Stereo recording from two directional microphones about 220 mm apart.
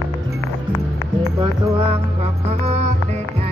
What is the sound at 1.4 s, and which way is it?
Music, 25° right (ahead or behind).